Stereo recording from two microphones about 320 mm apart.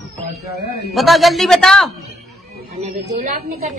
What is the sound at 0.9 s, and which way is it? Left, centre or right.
A man's voice, centre.